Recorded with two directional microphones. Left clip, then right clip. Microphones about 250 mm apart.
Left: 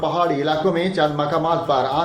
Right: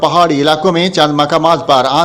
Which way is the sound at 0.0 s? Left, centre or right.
Right.